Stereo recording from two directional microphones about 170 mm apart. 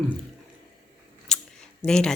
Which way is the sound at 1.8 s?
5° left (ahead or behind).